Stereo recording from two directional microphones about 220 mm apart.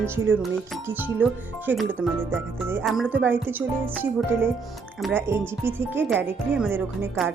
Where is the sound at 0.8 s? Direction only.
10° right (ahead or behind).